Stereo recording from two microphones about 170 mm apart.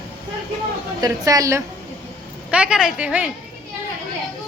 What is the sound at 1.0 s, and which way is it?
Speech, 20° right (ahead or behind).